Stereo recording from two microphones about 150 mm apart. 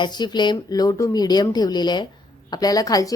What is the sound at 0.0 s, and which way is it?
A woman's voice, 30° left (ahead or behind).